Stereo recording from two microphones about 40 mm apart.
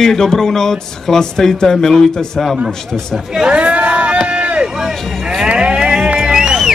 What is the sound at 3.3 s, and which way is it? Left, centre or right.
Speech, centre.